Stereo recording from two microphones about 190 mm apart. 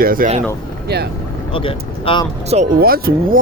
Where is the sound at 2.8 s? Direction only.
50° right (ahead or behind).